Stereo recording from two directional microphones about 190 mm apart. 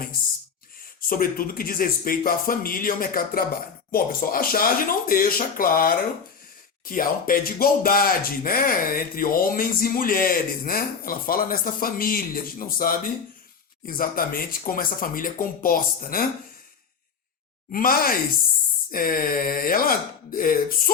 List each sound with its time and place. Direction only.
1.0 s speech: 50° left (ahead or behind)
17.7 s speech: 50° left (ahead or behind)